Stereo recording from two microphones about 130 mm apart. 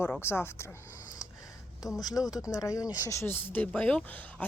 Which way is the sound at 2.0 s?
30° left (ahead or behind).